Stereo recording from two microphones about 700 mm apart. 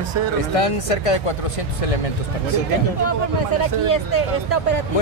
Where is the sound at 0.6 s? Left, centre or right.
Left.